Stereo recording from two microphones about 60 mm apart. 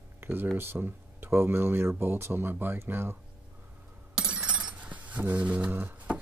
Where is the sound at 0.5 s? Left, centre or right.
Right.